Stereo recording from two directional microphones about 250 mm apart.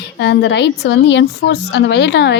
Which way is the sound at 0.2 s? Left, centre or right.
Left.